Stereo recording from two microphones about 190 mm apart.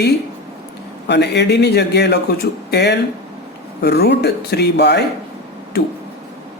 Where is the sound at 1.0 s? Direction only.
65° left (ahead or behind).